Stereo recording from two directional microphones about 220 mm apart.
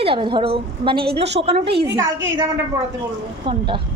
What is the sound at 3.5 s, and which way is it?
Speech, 20° right (ahead or behind).